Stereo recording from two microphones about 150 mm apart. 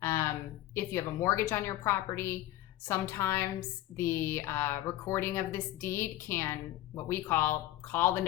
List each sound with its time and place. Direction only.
0.0 s a woman's voice: 15° left (ahead or behind)